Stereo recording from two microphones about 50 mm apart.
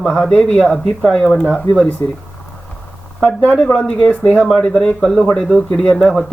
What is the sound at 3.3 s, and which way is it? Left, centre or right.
Speech, left.